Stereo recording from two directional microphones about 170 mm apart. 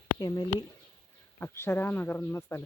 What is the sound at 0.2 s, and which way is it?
Speech, 20° left (ahead or behind).